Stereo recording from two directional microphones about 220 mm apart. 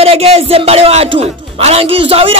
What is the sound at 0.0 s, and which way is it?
A man's voice, 25° right (ahead or behind).